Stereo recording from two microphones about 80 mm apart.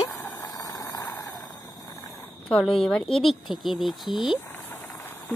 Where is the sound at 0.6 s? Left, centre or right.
Left.